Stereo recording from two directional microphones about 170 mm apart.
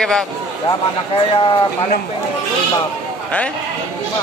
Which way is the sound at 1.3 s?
30° left (ahead or behind).